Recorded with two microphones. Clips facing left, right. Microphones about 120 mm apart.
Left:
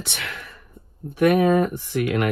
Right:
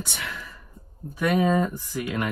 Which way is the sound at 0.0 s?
75° left (ahead or behind).